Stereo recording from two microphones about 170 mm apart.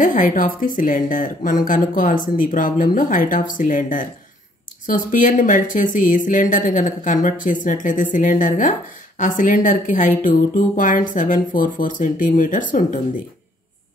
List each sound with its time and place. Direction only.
0.0 s speech: 50° left (ahead or behind)